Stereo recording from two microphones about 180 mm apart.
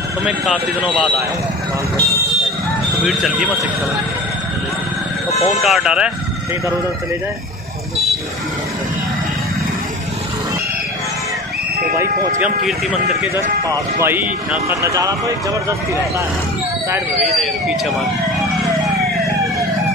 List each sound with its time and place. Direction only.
0.2 s speech: 5° right (ahead or behind)
3.1 s speech: centre (ahead or behind)
5.5 s speech: centre (ahead or behind)
13.7 s speech: 15° right (ahead or behind)
17.2 s speech: centre (ahead or behind)